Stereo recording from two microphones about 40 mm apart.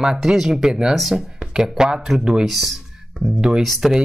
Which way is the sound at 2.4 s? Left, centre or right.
Centre.